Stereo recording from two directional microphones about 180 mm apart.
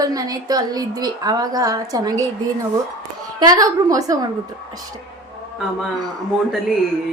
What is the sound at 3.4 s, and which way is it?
Speech, 20° right (ahead or behind).